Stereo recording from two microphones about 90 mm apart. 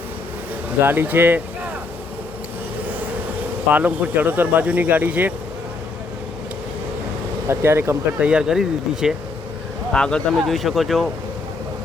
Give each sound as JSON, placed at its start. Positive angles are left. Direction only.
{"t": 0.8, "sound": "speech", "side_deg": -25}
{"t": 3.7, "sound": "speech", "side_deg": -15}
{"t": 7.4, "sound": "speech", "side_deg": -30}
{"t": 8.2, "sound": "speech", "side_deg": -10}
{"t": 9.9, "sound": "speech", "side_deg": 10}
{"t": 10.4, "sound": "speech", "side_deg": 0}